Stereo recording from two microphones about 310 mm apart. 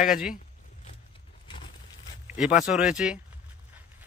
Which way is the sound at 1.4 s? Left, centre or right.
Centre.